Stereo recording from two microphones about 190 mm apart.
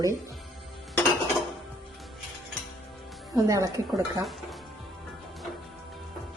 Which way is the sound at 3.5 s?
15° right (ahead or behind).